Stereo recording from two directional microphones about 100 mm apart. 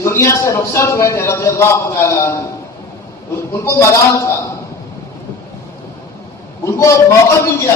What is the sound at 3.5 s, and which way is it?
Speech, 30° left (ahead or behind).